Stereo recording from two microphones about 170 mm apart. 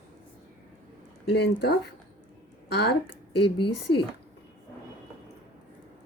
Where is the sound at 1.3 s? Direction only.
75° left (ahead or behind).